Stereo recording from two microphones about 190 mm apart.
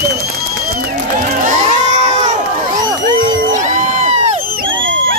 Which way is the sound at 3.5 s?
40° right (ahead or behind).